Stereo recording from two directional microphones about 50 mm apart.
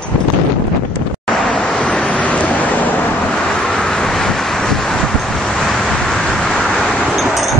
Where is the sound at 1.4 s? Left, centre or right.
Left.